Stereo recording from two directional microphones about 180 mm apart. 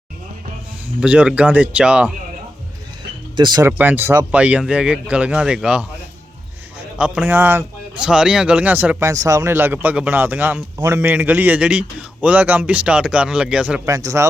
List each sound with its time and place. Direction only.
0.9 s a man's voice: 5° right (ahead or behind)
3.3 s speech: 25° right (ahead or behind)
3.7 s a man's voice: 10° right (ahead or behind)
7.0 s a man's voice: 10° right (ahead or behind)
13.8 s a man's voice: 20° right (ahead or behind)